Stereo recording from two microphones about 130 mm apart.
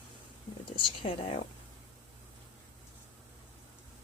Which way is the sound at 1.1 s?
45° left (ahead or behind).